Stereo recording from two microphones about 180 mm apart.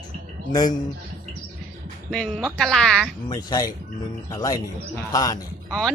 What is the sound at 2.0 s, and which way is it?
A woman's voice, centre (ahead or behind).